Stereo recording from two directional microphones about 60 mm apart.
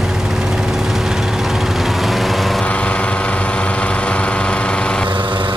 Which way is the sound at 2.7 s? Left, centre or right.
Left.